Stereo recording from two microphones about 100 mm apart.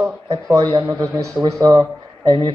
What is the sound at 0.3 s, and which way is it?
A woman's voice, 35° right (ahead or behind).